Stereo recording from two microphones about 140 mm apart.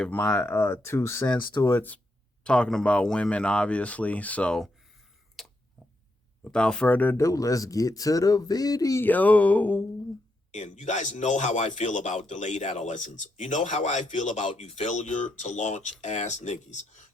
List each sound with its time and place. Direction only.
0.0 s speech: 10° left (ahead or behind)
5.4 s a sound: centre (ahead or behind)
6.4 s speech: 5° left (ahead or behind)
7.2 s speech: 25° left (ahead or behind)
10.5 s speech: 55° left (ahead or behind)